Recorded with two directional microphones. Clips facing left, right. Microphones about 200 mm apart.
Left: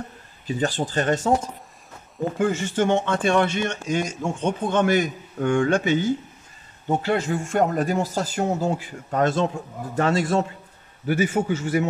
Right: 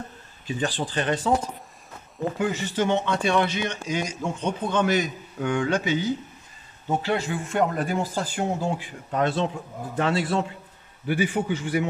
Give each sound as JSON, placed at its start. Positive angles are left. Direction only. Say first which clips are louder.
{"t": 0.5, "sound": "speech", "louder": "left 3 dB", "side_deg": 45}
{"t": 2.3, "sound": "speech", "louder": "left 4 dB", "side_deg": 50}